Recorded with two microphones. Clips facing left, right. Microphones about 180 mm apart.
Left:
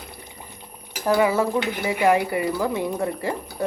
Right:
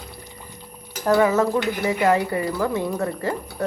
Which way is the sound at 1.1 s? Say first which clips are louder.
Right 2 dB; 10° left (ahead or behind).